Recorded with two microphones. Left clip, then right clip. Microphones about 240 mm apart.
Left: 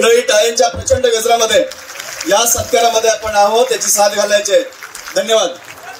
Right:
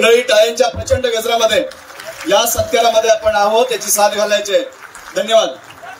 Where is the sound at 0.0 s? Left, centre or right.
Left.